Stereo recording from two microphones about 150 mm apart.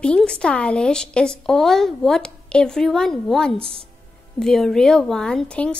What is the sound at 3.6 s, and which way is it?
Speech, 40° right (ahead or behind).